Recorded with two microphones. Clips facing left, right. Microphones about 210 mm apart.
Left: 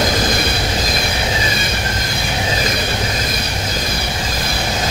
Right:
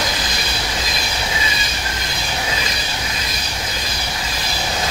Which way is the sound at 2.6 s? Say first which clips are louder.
Left 7 dB; 50° left (ahead or behind).